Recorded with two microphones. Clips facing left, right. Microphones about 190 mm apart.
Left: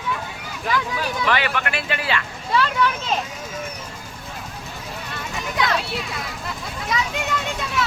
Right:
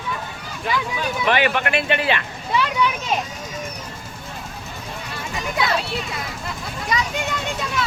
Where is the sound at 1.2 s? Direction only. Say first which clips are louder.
Right 5 dB; 20° right (ahead or behind).